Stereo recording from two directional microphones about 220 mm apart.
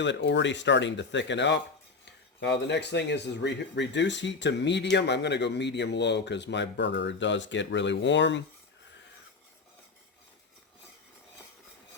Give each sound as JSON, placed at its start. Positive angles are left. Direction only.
{"t": 0.0, "sound": "speech", "side_deg": 55}